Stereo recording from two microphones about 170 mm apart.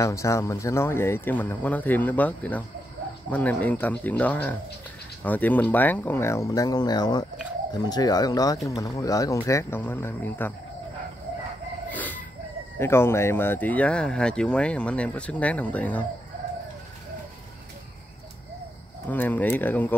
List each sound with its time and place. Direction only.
0.0 s speech: 15° left (ahead or behind)
11.9 s chicken: 10° left (ahead or behind)
12.7 s speech: 15° left (ahead or behind)
19.0 s speech: 10° left (ahead or behind)